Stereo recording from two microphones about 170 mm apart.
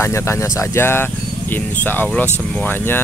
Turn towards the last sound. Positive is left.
turn(degrees=10)  # may be behind; listen again after turning